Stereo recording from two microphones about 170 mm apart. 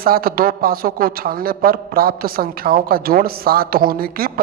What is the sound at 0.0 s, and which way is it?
A woman's voice, 60° right (ahead or behind).